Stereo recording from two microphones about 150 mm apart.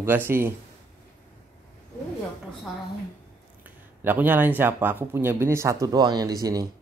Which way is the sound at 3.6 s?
10° right (ahead or behind).